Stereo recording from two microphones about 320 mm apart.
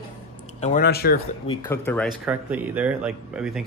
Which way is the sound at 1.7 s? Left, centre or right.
Centre.